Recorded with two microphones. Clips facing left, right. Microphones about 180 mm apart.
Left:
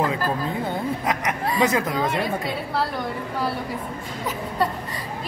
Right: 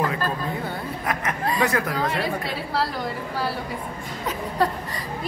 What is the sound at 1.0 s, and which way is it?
Speech, 20° left (ahead or behind).